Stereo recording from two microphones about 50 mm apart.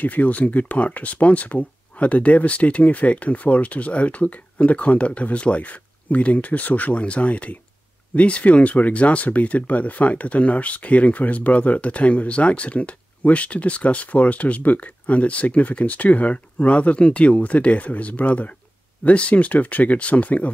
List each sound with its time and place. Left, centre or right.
0.0 s speech: left